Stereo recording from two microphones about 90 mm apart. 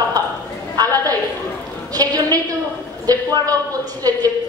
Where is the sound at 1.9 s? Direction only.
45° right (ahead or behind).